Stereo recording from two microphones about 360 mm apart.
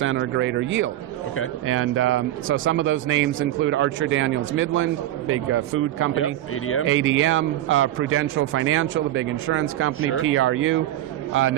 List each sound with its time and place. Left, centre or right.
0.0 s a man's voice: right
6.1 s speech: left
6.8 s a man's voice: right